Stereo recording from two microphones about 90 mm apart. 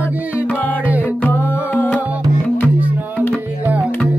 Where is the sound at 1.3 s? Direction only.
25° left (ahead or behind).